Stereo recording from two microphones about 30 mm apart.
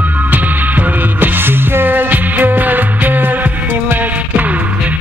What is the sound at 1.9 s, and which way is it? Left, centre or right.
Music, right.